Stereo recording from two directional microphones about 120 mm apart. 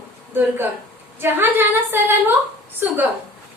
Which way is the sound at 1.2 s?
20° right (ahead or behind).